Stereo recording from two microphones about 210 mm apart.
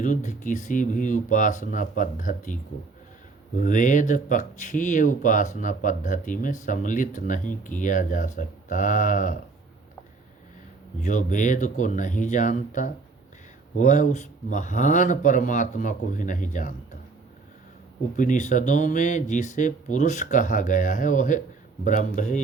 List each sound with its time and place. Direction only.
0.0 s speech: 35° left (ahead or behind)
11.0 s speech: 35° left (ahead or behind)
18.2 s speech: 35° left (ahead or behind)